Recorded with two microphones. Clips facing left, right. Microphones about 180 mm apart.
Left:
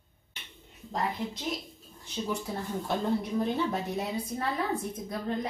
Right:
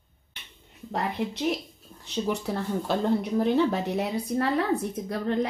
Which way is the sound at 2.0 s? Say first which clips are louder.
Right 5 dB; 70° right (ahead or behind).